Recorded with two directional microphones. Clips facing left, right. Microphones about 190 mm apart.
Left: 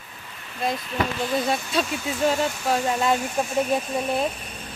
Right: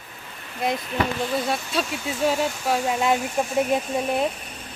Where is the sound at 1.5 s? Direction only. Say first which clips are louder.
Left 1 dB; centre (ahead or behind).